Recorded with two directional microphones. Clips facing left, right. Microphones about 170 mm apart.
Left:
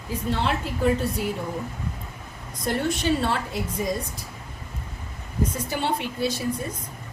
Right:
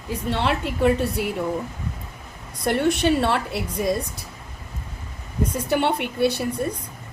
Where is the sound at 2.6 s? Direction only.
65° right (ahead or behind).